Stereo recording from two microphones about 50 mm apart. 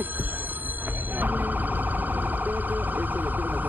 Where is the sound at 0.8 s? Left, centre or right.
Right.